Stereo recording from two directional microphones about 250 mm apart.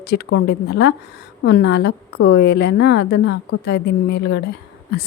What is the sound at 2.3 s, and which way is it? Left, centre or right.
A woman's voice, left.